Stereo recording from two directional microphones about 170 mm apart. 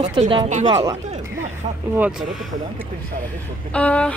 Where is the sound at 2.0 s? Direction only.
5° right (ahead or behind).